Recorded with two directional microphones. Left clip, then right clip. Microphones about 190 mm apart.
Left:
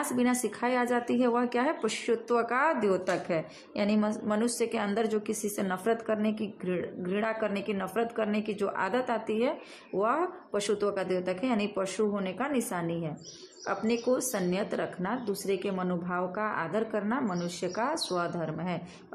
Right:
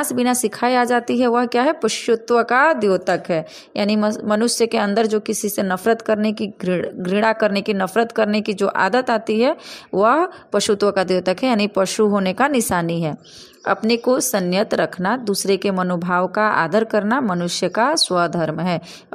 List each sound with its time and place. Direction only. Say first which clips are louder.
0.1 s a woman's voice: right 10 dB; 35° right (ahead or behind)